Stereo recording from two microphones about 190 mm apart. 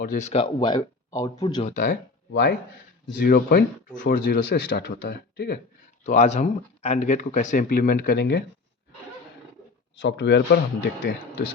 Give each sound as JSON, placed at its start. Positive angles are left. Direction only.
{"t": 0.0, "sound": "speech", "side_deg": 40}
{"t": 1.6, "sound": "speech", "side_deg": 45}
{"t": 2.3, "sound": "speech", "side_deg": 65}
{"t": 3.2, "sound": "speech", "side_deg": 50}
{"t": 4.8, "sound": "speech", "side_deg": 65}
{"t": 6.1, "sound": "speech", "side_deg": 35}
{"t": 10.0, "sound": "speech", "side_deg": 70}